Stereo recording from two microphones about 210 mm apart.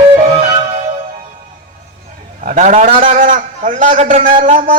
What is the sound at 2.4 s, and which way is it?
A man's voice, 35° right (ahead or behind).